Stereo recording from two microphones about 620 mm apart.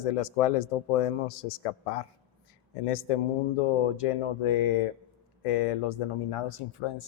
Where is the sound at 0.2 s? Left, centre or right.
Left.